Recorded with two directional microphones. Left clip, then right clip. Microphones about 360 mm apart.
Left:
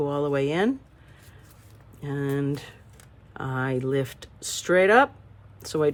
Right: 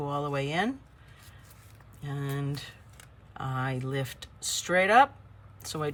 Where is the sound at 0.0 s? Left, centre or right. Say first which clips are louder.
Left 7 dB; centre.